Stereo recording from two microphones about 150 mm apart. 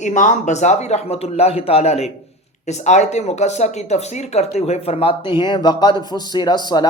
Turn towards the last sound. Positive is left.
turn(degrees=30)  # may be behind; listen again after turning